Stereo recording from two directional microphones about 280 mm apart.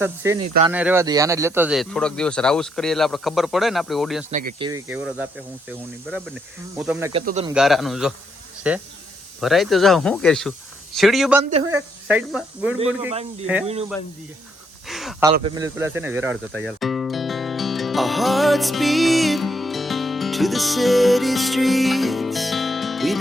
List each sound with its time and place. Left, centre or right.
0.0 s speech: centre
4.3 s speech: right
4.6 s speech: centre
7.1 s speech: right
7.5 s speech: centre
14.8 s a sound: centre
15.2 s music: centre